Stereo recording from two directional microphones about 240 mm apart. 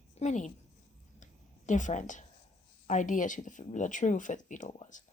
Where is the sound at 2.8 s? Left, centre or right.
Left.